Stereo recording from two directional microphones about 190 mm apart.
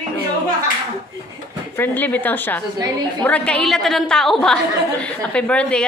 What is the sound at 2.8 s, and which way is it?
Speech, 20° right (ahead or behind).